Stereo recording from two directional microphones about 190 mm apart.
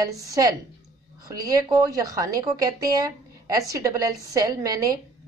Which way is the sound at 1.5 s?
20° right (ahead or behind).